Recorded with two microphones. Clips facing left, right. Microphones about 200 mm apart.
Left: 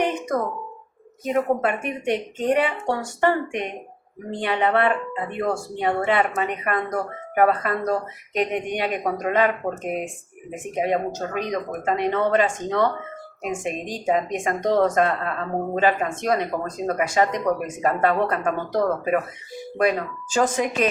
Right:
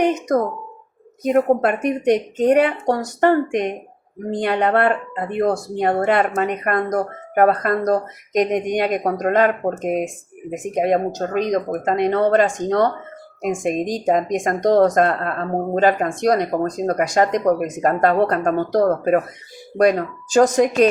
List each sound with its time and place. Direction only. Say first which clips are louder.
0.3 s a woman's voice: right 5 dB; 40° right (ahead or behind)